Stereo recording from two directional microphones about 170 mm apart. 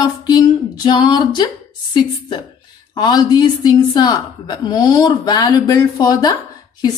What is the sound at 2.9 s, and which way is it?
A woman's voice, 25° left (ahead or behind).